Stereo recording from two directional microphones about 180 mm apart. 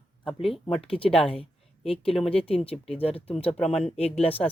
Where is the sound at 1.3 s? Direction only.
30° left (ahead or behind).